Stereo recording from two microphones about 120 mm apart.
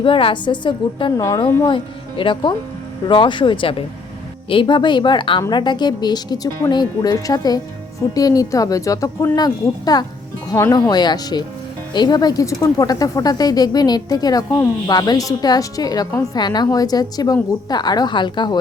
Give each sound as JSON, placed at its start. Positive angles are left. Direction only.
{"t": 0.0, "sound": "a woman's voice", "side_deg": 45}
{"t": 1.1, "sound": "speech", "side_deg": 25}
{"t": 1.6, "sound": "a woman's voice", "side_deg": 45}